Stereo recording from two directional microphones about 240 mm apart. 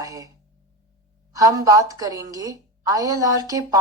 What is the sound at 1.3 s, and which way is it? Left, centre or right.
Speech, centre.